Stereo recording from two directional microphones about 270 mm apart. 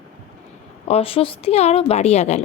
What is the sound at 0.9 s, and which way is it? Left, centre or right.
A woman's voice, left.